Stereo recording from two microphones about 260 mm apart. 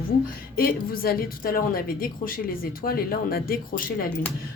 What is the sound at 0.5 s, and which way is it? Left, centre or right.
A woman's voice, left.